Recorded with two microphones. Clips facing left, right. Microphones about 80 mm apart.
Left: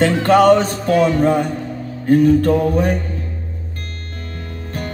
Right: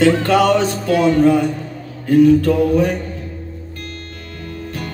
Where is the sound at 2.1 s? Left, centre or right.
Left.